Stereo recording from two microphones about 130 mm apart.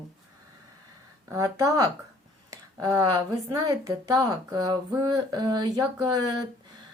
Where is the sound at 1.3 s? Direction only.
25° right (ahead or behind).